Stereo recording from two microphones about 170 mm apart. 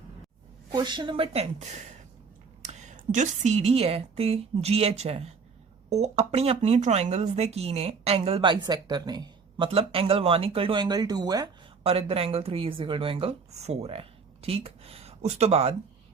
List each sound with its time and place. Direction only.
0.7 s a woman's voice: 25° right (ahead or behind)
11.8 s speech: 35° right (ahead or behind)